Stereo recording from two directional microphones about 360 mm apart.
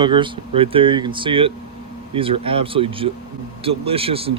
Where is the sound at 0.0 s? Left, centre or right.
Centre.